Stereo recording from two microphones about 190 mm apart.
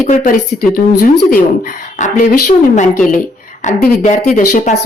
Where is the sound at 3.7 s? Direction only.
45° left (ahead or behind).